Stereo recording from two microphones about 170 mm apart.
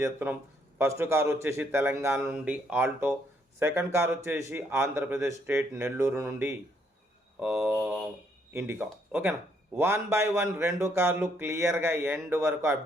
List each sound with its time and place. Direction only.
0.0 s a man's voice: 10° right (ahead or behind)